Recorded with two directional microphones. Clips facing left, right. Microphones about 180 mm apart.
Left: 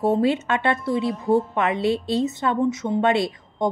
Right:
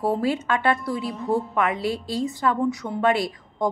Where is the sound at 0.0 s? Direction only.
25° left (ahead or behind).